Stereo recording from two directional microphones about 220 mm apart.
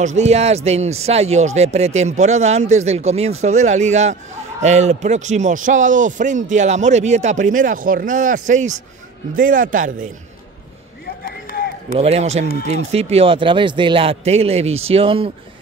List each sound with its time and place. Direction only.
0.0 s a man's voice: 30° right (ahead or behind)
11.2 s run: 45° left (ahead or behind)
12.0 s a man's voice: 30° right (ahead or behind)